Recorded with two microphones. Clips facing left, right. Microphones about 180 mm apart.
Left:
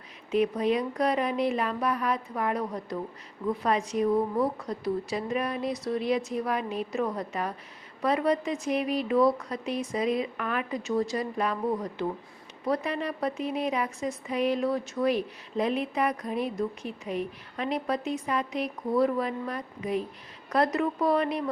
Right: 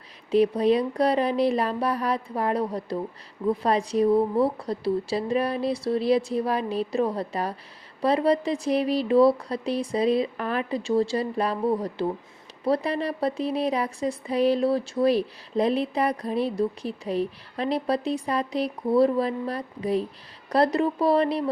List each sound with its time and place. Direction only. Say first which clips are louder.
0.3 s a woman's voice: right 5 dB; 35° right (ahead or behind)